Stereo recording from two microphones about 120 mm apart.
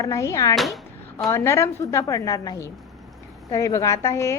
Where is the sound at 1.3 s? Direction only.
25° left (ahead or behind).